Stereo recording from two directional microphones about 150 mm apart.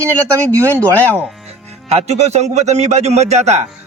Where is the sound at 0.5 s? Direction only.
20° right (ahead or behind).